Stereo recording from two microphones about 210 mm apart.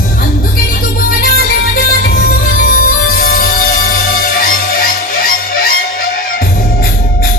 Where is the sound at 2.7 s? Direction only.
40° left (ahead or behind).